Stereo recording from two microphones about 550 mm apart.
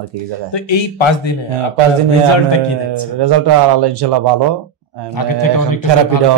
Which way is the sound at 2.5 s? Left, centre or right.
Left.